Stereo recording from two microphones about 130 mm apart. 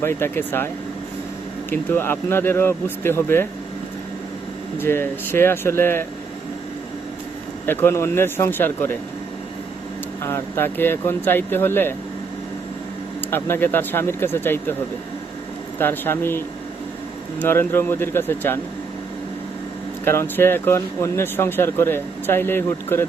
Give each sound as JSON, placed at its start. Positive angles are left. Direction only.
{"t": 0.0, "sound": "speech", "side_deg": 15}
{"t": 1.7, "sound": "speech", "side_deg": 15}
{"t": 4.8, "sound": "speech", "side_deg": 15}
{"t": 7.7, "sound": "speech", "side_deg": 15}
{"t": 10.2, "sound": "speech", "side_deg": 20}
{"t": 13.3, "sound": "speech", "side_deg": 15}
{"t": 15.8, "sound": "speech", "side_deg": 15}
{"t": 17.4, "sound": "speech", "side_deg": 15}
{"t": 20.1, "sound": "speech", "side_deg": 15}